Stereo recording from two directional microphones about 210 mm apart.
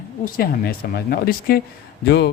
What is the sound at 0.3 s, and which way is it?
Speech, 45° left (ahead or behind).